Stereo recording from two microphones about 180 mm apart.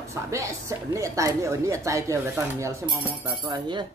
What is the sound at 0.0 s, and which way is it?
A woman's voice, 15° right (ahead or behind).